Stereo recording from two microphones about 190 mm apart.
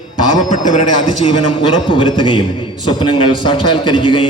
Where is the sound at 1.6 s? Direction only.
25° left (ahead or behind).